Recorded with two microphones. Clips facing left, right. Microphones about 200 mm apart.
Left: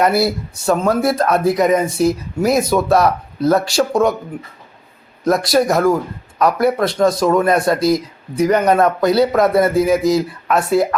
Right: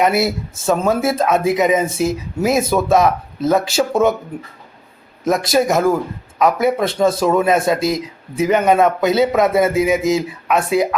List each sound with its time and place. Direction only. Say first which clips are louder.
0.1 s speech: left 1 dB; 20° right (ahead or behind)
0.5 s speech: even; centre (ahead or behind)
5.2 s speech: left 1 dB; centre (ahead or behind)
9.0 s speech: left 3 dB; 20° right (ahead or behind)
9.3 s speech: left 1 dB; centre (ahead or behind)
9.6 s speech: left 1 dB; 20° right (ahead or behind)
10.5 s speech: left 1 dB; centre (ahead or behind)